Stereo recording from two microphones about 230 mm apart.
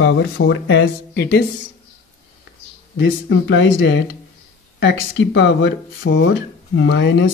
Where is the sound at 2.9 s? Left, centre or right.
Left.